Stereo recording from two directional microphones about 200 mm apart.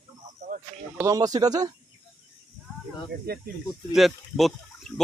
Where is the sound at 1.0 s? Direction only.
20° right (ahead or behind).